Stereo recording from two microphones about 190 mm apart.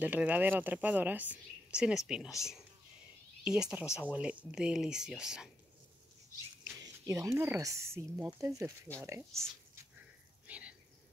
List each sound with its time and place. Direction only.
0.0 s speech: 10° right (ahead or behind)
3.4 s speech: 5° right (ahead or behind)
3.8 s speech: 15° left (ahead or behind)
4.1 s speech: 5° right (ahead or behind)
7.1 s speech: 15° right (ahead or behind)
10.4 s a sound: 5° right (ahead or behind)